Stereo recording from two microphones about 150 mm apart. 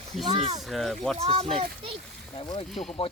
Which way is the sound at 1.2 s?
45° right (ahead or behind).